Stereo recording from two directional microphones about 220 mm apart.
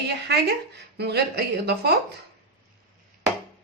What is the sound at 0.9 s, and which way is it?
Speech, 50° right (ahead or behind).